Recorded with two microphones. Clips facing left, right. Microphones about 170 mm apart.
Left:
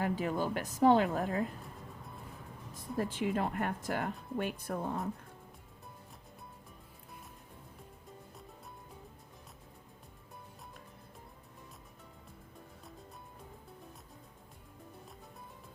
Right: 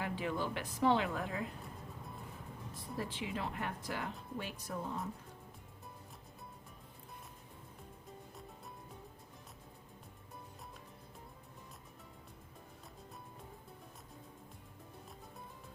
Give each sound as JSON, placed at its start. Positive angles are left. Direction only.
{"t": 0.0, "sound": "a woman's voice", "side_deg": 45}
{"t": 3.0, "sound": "a woman's voice", "side_deg": 45}